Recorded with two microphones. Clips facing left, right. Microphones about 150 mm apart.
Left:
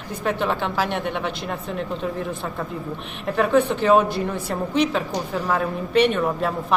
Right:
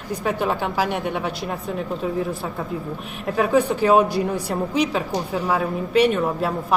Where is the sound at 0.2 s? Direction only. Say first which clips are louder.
Even; 10° right (ahead or behind).